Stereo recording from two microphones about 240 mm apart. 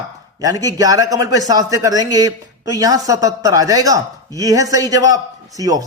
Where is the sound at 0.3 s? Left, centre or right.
Centre.